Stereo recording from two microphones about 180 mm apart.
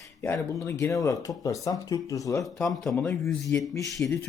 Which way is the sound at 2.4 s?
Centre (ahead or behind).